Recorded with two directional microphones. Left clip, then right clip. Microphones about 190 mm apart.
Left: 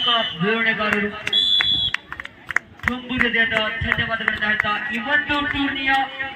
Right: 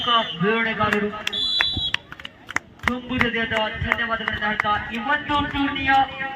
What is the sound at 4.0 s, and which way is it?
Speech, 20° left (ahead or behind).